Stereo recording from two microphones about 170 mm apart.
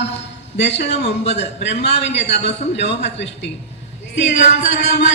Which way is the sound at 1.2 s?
40° left (ahead or behind).